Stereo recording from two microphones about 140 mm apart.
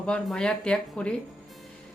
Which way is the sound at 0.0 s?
5° left (ahead or behind).